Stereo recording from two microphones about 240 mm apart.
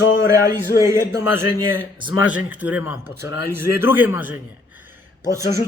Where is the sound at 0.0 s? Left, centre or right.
Left.